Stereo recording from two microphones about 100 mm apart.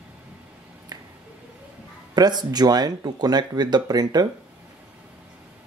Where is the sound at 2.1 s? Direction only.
45° right (ahead or behind).